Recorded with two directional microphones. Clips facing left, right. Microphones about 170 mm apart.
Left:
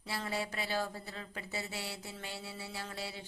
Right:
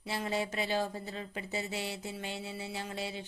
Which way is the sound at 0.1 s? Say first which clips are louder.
Right 4 dB; 20° right (ahead or behind).